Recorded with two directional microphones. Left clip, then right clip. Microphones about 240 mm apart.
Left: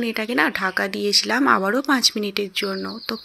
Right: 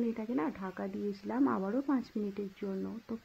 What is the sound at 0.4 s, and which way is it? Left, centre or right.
Speech, left.